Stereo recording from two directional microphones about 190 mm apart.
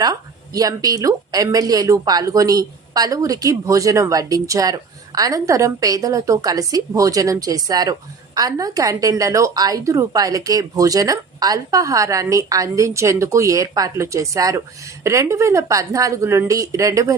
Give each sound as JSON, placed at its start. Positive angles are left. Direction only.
{"t": 0.0, "sound": "a woman's voice", "side_deg": -20}